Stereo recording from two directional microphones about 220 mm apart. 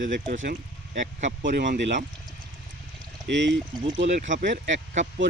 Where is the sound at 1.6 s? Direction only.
55° right (ahead or behind).